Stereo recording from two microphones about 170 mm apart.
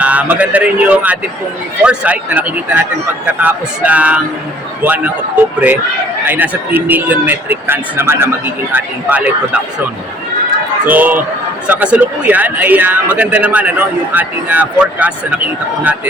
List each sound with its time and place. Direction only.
0.0 s a man's voice: 10° right (ahead or behind)
6.2 s a man's voice: 10° right (ahead or behind)
10.8 s a man's voice: 10° right (ahead or behind)